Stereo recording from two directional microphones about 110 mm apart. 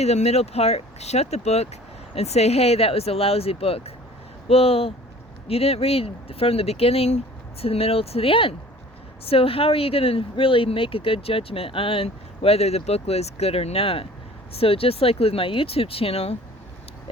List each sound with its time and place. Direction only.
0.0 s speech: 80° left